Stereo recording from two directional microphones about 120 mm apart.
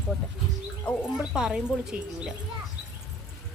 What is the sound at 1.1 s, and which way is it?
A woman's voice, 5° right (ahead or behind).